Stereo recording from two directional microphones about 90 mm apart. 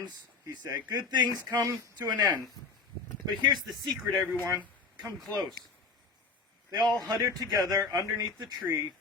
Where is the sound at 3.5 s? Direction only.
Centre (ahead or behind).